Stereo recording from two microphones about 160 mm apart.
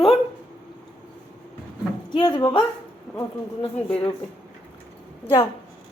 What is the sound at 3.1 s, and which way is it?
Speech, centre (ahead or behind).